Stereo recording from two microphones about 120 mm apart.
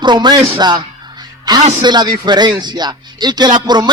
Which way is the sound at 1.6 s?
60° right (ahead or behind).